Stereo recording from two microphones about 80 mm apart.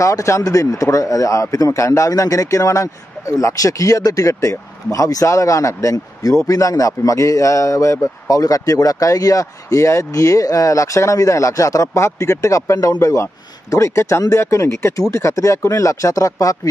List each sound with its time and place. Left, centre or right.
0.0 s a man's voice: left